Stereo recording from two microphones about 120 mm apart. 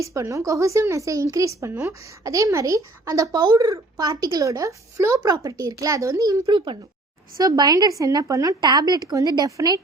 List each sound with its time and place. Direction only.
0.0 s a woman's voice: 25° right (ahead or behind)